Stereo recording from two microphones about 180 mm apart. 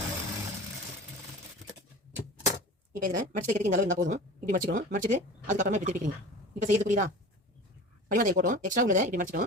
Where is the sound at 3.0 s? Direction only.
50° right (ahead or behind).